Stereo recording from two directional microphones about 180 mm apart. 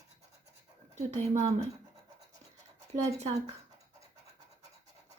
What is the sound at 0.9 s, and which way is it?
Speech, 40° right (ahead or behind).